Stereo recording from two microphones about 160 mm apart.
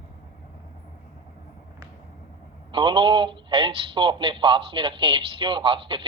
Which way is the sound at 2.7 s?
30° right (ahead or behind).